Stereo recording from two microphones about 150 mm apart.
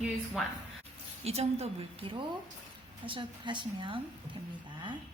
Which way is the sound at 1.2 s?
45° right (ahead or behind).